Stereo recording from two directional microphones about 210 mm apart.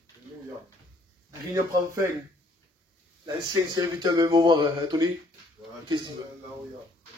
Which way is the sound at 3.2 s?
20° right (ahead or behind).